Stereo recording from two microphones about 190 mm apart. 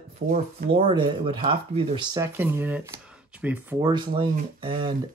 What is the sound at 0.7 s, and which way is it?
Speech, 25° right (ahead or behind).